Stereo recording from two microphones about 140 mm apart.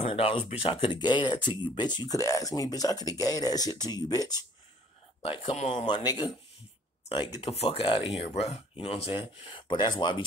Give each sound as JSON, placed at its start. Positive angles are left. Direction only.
{"t": 0.1, "sound": "speech", "side_deg": 45}
{"t": 5.2, "sound": "speech", "side_deg": 40}
{"t": 5.9, "sound": "speech", "side_deg": 35}